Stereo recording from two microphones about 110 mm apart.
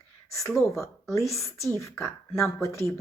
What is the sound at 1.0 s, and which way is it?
Speech, 25° left (ahead or behind).